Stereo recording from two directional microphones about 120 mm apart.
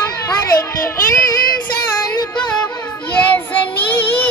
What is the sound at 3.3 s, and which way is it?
Child singing, 15° left (ahead or behind).